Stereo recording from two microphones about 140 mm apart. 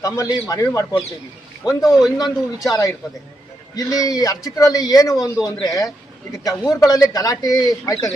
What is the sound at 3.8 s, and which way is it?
Speech, 25° left (ahead or behind).